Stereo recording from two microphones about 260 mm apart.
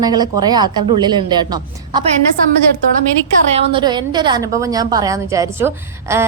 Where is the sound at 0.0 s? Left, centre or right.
Centre.